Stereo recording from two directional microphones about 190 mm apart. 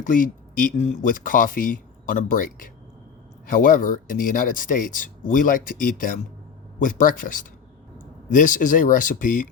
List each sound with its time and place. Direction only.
0.0 s speech: 45° left (ahead or behind)
3.5 s speech: 45° left (ahead or behind)